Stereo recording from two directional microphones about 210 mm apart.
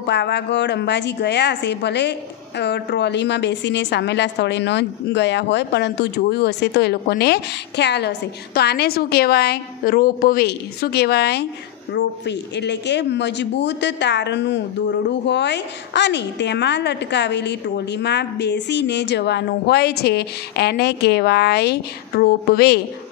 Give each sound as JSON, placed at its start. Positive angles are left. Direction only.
{"t": 0.0, "sound": "a woman's voice", "side_deg": 55}